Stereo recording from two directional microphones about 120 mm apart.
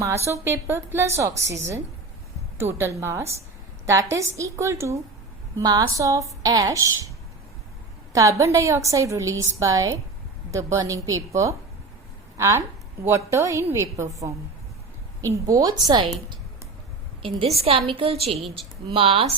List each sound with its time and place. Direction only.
0.0 s a woman's voice: 25° right (ahead or behind)
8.1 s a woman's voice: 25° right (ahead or behind)
15.2 s a woman's voice: 25° right (ahead or behind)
17.6 s a woman's voice: 55° right (ahead or behind)